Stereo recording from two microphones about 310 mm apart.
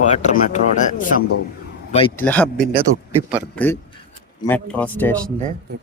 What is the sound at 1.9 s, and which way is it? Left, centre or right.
Speech, centre.